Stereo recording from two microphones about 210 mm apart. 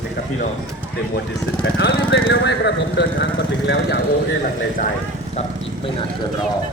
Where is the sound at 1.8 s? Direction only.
50° left (ahead or behind).